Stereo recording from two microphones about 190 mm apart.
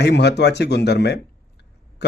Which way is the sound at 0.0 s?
60° left (ahead or behind).